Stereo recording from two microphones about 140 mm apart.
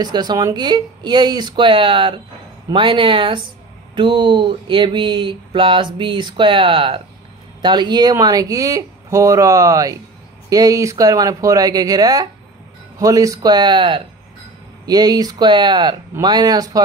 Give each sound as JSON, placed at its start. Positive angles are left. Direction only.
{"t": 0.0, "sound": "speech", "side_deg": -30}